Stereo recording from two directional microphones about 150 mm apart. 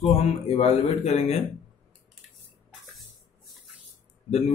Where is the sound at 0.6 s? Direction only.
45° left (ahead or behind).